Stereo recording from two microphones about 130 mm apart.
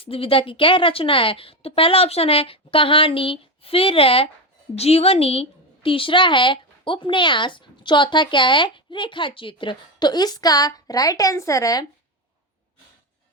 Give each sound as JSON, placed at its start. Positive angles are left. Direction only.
{"t": 0.0, "sound": "a woman's voice", "side_deg": 45}